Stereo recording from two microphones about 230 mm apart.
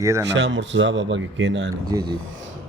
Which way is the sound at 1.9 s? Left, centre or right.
Centre.